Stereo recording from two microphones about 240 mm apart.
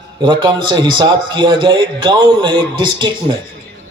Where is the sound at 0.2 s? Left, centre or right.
Centre.